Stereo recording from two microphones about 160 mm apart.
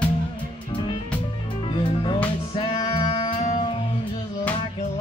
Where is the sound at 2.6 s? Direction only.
35° left (ahead or behind).